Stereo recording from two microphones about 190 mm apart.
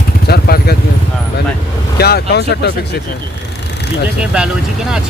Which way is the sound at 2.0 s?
60° left (ahead or behind).